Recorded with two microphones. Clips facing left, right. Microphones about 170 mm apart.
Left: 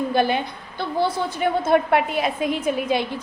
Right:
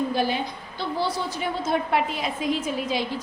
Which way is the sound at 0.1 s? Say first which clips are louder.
Left 4 dB; 60° left (ahead or behind).